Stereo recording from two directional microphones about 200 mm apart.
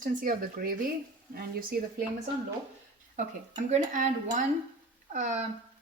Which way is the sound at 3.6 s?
40° right (ahead or behind).